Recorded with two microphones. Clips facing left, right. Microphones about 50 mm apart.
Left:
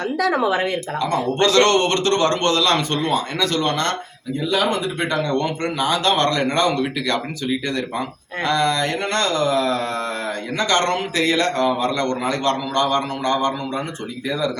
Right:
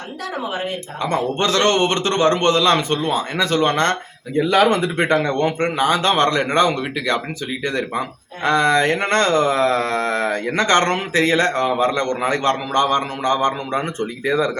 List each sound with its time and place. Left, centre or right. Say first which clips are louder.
1.0 s speech: even; right
4.4 s speech: right 5 dB; right
8.4 s speech: right 4 dB; right